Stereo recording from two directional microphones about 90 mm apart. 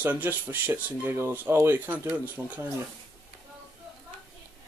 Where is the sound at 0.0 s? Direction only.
20° right (ahead or behind).